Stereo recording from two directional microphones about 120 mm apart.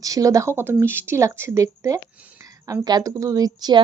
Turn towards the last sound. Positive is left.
turn(degrees=-35)  # may be behind; listen again after turning